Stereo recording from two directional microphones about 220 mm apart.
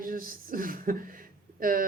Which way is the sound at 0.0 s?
40° right (ahead or behind).